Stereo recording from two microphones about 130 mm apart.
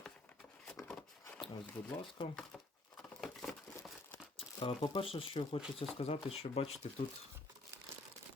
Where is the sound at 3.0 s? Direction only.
5° left (ahead or behind).